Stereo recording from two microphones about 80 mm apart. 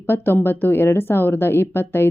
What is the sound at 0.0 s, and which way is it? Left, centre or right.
A woman's voice, left.